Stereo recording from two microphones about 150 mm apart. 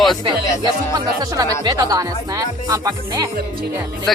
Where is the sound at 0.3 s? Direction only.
25° right (ahead or behind).